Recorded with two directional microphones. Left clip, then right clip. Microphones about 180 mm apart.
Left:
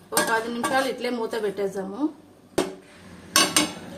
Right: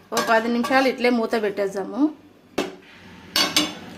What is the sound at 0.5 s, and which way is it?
A woman's voice, 45° right (ahead or behind).